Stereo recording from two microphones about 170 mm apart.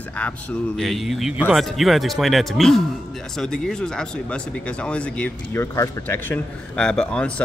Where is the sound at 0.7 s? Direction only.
Centre (ahead or behind).